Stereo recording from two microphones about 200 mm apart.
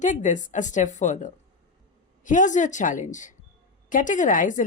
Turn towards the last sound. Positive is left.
turn(degrees=40)  # may be behind; listen again after turning